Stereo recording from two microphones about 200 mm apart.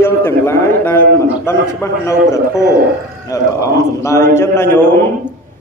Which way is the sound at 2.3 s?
15° left (ahead or behind).